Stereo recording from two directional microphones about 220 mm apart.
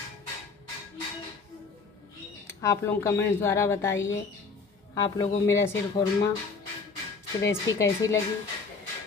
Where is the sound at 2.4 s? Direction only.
10° left (ahead or behind).